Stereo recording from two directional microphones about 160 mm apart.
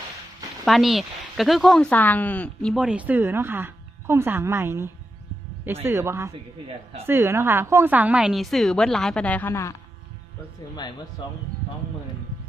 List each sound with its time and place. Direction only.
0.6 s a woman's voice: centre (ahead or behind)
2.7 s a woman's voice: 5° right (ahead or behind); by 9.7 s 15° left (ahead or behind)